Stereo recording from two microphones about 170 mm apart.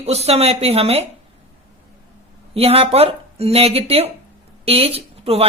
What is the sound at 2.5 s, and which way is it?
Speech, 35° right (ahead or behind).